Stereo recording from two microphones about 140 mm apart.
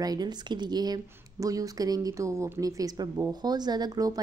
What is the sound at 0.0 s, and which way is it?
Speech, 30° right (ahead or behind).